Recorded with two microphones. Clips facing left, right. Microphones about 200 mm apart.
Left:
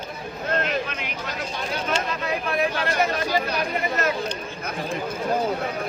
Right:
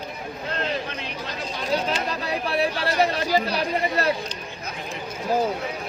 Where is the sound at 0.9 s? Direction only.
30° right (ahead or behind).